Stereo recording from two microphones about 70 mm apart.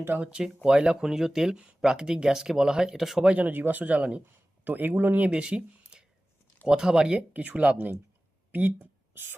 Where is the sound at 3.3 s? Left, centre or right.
Right.